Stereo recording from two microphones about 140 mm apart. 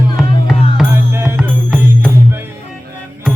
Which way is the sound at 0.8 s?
15° right (ahead or behind).